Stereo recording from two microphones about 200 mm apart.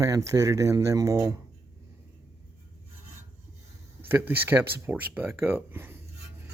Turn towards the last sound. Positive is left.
turn(degrees=-10)  # may be behind; listen again after turning